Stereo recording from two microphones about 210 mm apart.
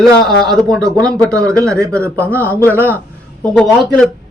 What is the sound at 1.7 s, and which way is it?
Speech, 15° right (ahead or behind).